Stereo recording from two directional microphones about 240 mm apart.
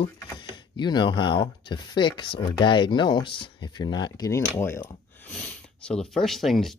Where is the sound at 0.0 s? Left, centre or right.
Centre.